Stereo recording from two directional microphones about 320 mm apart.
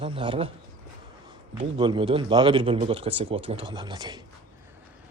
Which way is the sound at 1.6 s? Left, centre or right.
Centre.